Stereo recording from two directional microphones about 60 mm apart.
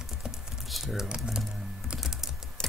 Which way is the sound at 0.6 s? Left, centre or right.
Centre.